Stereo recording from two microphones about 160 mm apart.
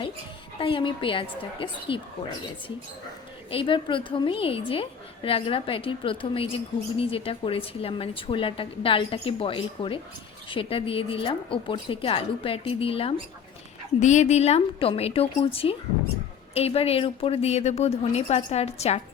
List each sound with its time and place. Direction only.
0.6 s a woman's voice: 30° left (ahead or behind)
3.5 s a woman's voice: 30° left (ahead or behind)
14.0 s a woman's voice: 45° left (ahead or behind)